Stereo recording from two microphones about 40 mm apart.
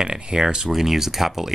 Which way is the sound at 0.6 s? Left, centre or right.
Centre.